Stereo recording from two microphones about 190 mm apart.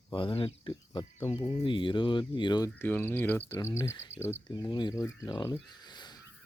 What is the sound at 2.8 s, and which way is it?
Speech, 10° left (ahead or behind).